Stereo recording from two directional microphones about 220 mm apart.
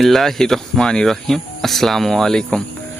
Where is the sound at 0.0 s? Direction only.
Centre (ahead or behind).